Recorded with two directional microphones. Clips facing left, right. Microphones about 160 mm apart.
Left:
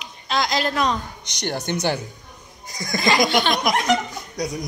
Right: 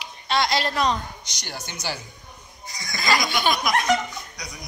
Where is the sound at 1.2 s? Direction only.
60° left (ahead or behind).